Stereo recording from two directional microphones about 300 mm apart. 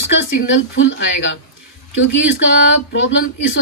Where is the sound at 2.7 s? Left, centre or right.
Left.